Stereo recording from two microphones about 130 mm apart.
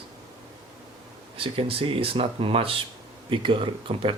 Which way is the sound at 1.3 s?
45° right (ahead or behind).